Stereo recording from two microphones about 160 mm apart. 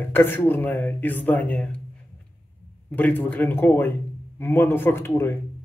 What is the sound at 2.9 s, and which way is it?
Speech, 10° left (ahead or behind).